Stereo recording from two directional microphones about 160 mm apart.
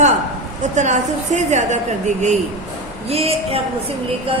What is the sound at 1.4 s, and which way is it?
A woman's voice, 45° right (ahead or behind).